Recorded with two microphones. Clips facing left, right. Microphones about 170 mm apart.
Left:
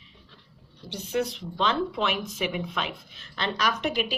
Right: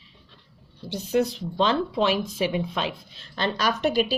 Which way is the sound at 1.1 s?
35° right (ahead or behind).